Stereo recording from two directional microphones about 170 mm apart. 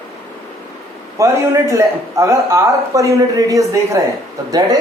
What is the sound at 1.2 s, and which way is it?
Speech, 20° right (ahead or behind).